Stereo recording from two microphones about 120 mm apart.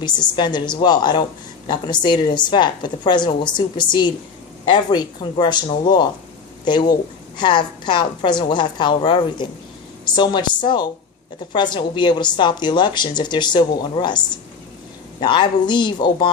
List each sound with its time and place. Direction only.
0.0 s speech: 40° left (ahead or behind)